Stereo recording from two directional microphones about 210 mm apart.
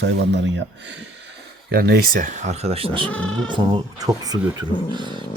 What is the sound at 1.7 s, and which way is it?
Speech, 45° right (ahead or behind).